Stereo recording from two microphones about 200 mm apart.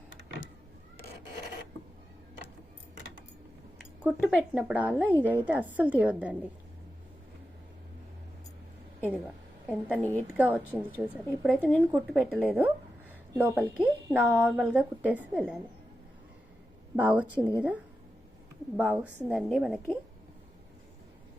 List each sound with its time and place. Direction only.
4.0 s a woman's voice: 5° right (ahead or behind)
9.6 s a woman's voice: 5° right (ahead or behind)
10.0 s a woman's voice: 10° left (ahead or behind)
10.3 s a woman's voice: 10° right (ahead or behind)
17.0 s a woman's voice: 5° right (ahead or behind)
18.8 s a woman's voice: 5° right (ahead or behind)